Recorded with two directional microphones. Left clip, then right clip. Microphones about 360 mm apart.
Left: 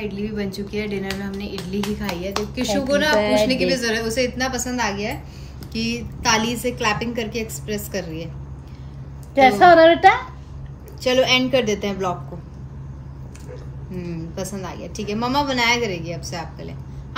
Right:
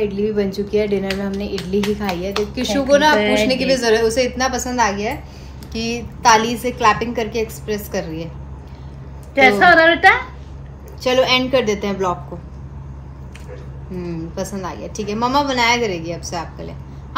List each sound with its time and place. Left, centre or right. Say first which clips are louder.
0.0 s a woman's voice: right 9 dB; centre
9.3 s a woman's voice: right 1 dB; left
11.0 s a woman's voice: right 2 dB; centre
14.1 s a woman's voice: right 4 dB; centre